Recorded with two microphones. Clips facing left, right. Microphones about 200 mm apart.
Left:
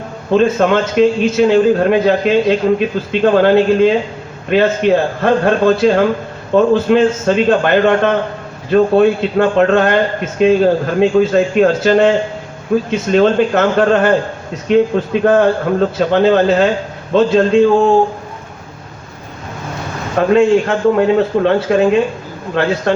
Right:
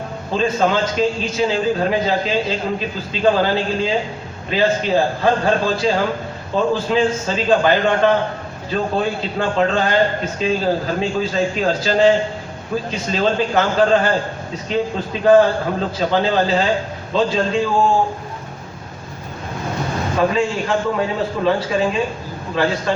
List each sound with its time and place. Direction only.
0.3 s a man's voice: 60° left (ahead or behind)
20.3 s a man's voice: 65° left (ahead or behind)